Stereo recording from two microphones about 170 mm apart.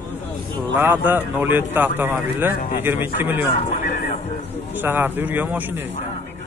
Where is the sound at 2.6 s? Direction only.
55° left (ahead or behind).